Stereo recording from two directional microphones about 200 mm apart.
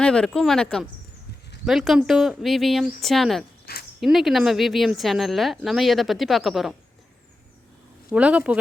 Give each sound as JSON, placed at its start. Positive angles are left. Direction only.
{"t": 0.0, "sound": "speech", "side_deg": 5}
{"t": 3.7, "sound": "a sound", "side_deg": 50}
{"t": 4.0, "sound": "speech", "side_deg": 0}
{"t": 8.1, "sound": "speech", "side_deg": -5}